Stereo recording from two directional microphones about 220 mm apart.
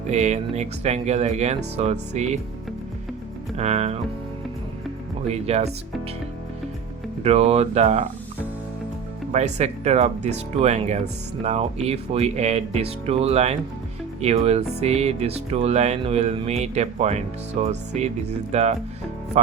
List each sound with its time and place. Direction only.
0.1 s speech: 30° right (ahead or behind)
3.6 s speech: 30° right (ahead or behind)
5.3 s speech: 30° right (ahead or behind)
7.3 s speech: 30° right (ahead or behind)
9.3 s speech: 30° right (ahead or behind)